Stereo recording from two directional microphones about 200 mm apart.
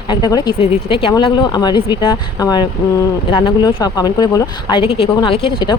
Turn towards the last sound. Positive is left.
turn(degrees=25)  # may be behind; listen again after turning